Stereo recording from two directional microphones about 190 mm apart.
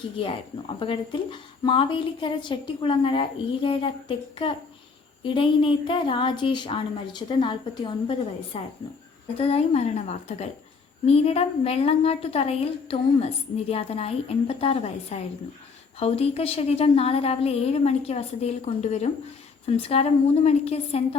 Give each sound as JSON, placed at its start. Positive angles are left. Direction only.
{"t": 0.8, "sound": "a woman's voice", "side_deg": 25}
{"t": 5.2, "sound": "a woman's voice", "side_deg": 25}